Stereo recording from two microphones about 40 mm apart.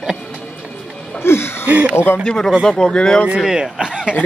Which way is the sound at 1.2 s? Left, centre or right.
Left.